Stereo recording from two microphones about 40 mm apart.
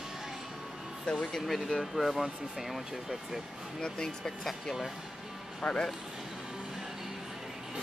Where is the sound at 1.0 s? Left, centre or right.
Left.